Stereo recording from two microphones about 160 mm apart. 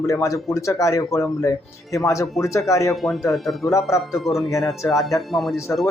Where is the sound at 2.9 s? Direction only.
Centre (ahead or behind).